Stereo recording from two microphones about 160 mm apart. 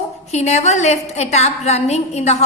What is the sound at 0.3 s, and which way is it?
A woman's voice, 45° left (ahead or behind).